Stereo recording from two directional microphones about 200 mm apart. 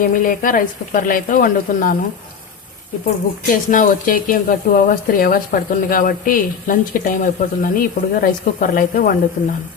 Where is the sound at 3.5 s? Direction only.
40° left (ahead or behind).